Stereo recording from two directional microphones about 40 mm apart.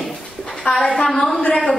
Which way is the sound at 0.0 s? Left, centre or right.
Centre.